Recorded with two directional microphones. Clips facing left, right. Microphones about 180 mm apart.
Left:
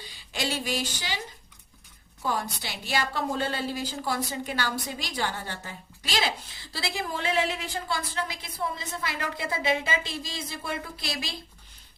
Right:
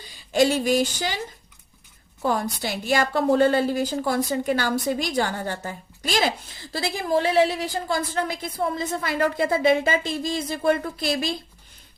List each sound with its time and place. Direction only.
0.3 s a woman's voice: 45° right (ahead or behind)
2.2 s a woman's voice: 50° right (ahead or behind)